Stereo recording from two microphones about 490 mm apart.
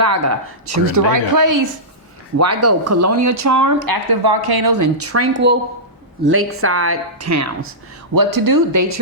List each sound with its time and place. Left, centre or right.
0.0 s a woman's voice: right